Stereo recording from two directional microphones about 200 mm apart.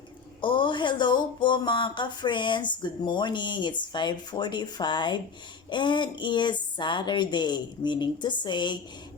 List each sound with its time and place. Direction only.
0.4 s speech: 25° left (ahead or behind)